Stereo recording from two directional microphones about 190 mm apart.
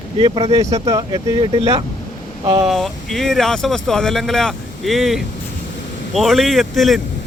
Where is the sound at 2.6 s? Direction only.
Centre (ahead or behind).